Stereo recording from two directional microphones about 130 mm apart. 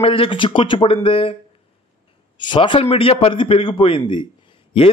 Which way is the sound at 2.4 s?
40° left (ahead or behind).